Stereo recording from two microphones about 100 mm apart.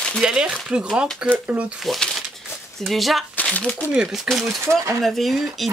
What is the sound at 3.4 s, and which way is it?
Speech, 15° left (ahead or behind).